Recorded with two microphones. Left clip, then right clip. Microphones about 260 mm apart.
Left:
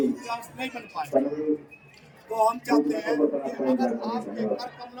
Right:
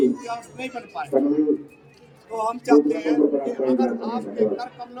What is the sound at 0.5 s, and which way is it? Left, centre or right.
Speech, centre.